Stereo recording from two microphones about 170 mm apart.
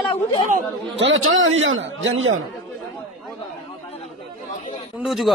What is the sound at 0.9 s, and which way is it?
A man's voice, 90° right.